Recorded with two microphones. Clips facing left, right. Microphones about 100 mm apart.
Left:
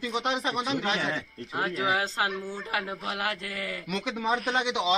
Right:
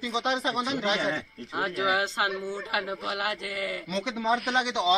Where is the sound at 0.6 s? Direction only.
20° right (ahead or behind).